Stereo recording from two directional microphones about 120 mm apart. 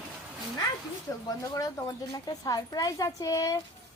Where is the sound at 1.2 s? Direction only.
30° left (ahead or behind).